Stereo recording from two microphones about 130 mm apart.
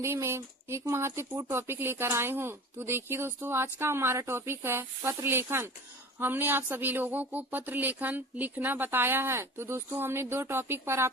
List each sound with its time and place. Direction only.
0.0 s speech: 20° right (ahead or behind)